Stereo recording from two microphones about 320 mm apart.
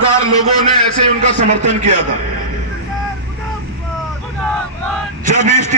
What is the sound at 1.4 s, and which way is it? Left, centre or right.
Speech, right.